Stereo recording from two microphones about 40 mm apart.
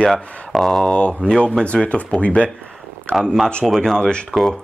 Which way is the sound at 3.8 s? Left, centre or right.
Centre.